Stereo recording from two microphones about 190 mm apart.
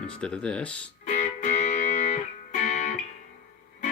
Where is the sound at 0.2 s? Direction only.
5° left (ahead or behind).